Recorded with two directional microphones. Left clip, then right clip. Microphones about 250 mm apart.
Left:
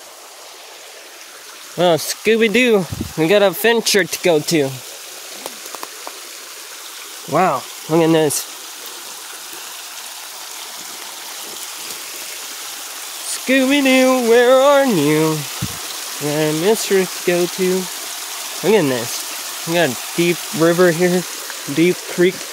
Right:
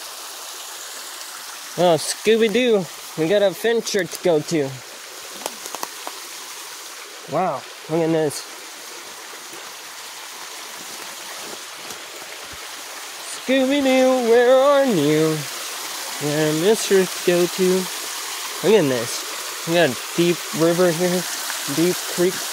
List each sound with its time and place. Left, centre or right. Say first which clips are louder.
1.8 s speech: left 2 dB; centre
7.3 s speech: left 6 dB; left
13.5 s speech: left 4 dB; left
16.3 s speech: left 2 dB; centre
20.5 s speech: left 5 dB; left